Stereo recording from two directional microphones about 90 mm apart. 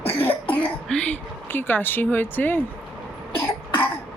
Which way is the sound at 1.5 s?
20° left (ahead or behind).